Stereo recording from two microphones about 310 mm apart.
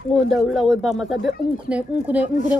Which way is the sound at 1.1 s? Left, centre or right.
Left.